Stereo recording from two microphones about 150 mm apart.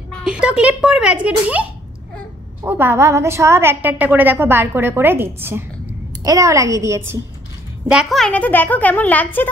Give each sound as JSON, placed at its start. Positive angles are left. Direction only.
{"t": 0.1, "sound": "a woman's voice", "side_deg": -5}
{"t": 7.9, "sound": "a woman's voice", "side_deg": 0}